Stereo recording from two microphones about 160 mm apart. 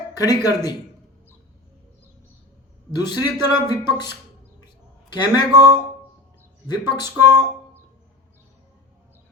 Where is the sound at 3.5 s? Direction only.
25° left (ahead or behind).